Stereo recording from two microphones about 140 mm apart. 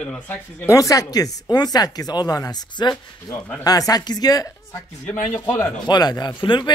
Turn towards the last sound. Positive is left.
turn(degrees=35)  # may be behind; listen again after turning